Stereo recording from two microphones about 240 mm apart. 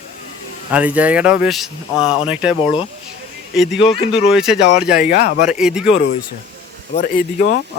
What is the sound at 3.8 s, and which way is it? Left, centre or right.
Speech, left.